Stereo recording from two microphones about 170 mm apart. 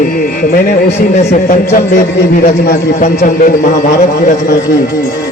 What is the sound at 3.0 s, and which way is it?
A man's voice, 45° left (ahead or behind).